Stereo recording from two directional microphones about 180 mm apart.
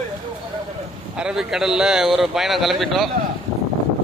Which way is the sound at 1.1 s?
5° right (ahead or behind).